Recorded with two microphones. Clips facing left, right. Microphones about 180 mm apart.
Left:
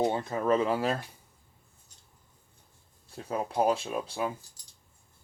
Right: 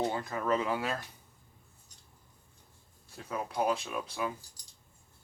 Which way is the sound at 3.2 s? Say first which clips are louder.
Left 4 dB; 30° left (ahead or behind).